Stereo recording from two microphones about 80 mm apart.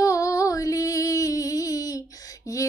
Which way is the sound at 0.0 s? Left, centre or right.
Left.